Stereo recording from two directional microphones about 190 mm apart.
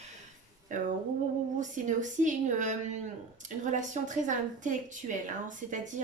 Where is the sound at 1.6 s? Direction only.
40° right (ahead or behind).